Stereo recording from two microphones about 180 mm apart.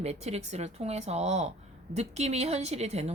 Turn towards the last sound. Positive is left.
turn(degrees=-35)  # may be behind; listen again after turning